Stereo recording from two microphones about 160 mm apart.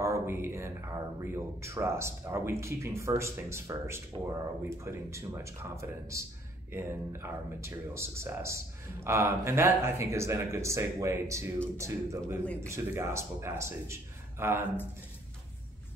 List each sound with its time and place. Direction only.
0.0 s speech: 15° right (ahead or behind)